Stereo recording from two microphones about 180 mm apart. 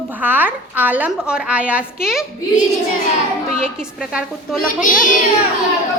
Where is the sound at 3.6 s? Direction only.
5° right (ahead or behind).